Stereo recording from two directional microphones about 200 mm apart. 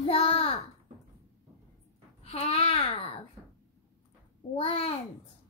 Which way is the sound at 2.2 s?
30° left (ahead or behind).